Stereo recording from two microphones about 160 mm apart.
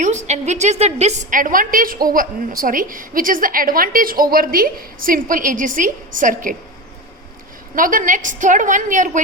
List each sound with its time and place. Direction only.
0.0 s a woman's voice: 45° right (ahead or behind)
7.8 s a woman's voice: 60° right (ahead or behind)